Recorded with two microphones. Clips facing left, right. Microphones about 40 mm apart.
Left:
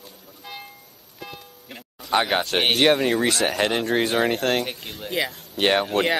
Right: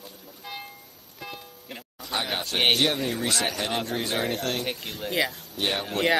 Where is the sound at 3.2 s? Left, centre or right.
Left.